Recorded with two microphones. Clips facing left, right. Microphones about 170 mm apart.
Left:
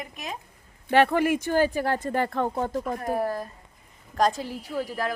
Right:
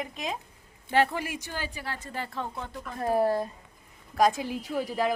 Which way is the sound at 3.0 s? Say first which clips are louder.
Right 8 dB; 25° right (ahead or behind).